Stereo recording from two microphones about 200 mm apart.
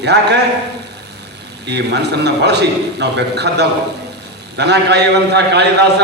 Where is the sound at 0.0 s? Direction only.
55° right (ahead or behind).